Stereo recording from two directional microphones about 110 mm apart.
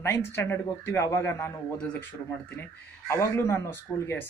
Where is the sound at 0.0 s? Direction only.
20° left (ahead or behind).